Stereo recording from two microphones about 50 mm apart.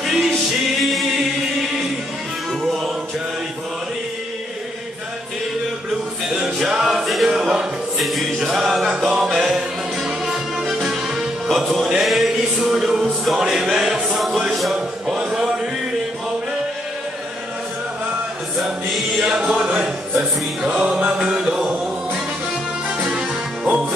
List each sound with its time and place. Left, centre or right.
0.0 s music: centre
0.8 s singing: centre
2.6 s music: centre
6.2 s music: centre
7.2 s a sound: centre
8.0 s music: centre
11.8 s chant: centre
12.1 s music: centre
15.0 s a sound: centre
18.6 s music: centre
19.2 s chant: centre
19.5 s music: right
19.8 s music: centre